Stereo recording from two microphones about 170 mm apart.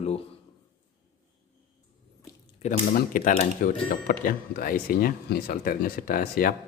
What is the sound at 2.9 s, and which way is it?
Speech, 55° left (ahead or behind).